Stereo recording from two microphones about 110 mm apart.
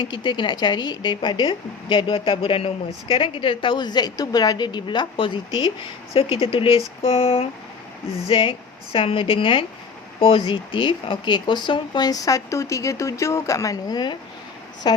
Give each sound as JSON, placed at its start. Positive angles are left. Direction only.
{"t": 0.0, "sound": "speech", "side_deg": 45}
{"t": 6.1, "sound": "speech", "side_deg": 55}